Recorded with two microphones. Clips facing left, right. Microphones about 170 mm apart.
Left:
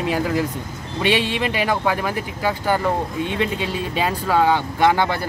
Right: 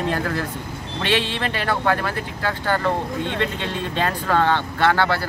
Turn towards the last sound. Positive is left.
turn(degrees=15)  # may be behind; listen again after turning